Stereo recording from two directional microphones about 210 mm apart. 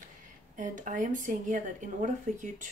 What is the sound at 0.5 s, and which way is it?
A woman's voice, 35° right (ahead or behind).